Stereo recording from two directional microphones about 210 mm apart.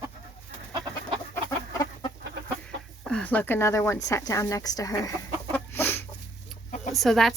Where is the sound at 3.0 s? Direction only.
5° left (ahead or behind).